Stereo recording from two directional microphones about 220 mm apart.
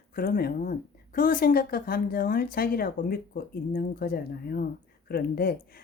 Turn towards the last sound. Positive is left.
turn(degrees=45)  # may be behind; listen again after turning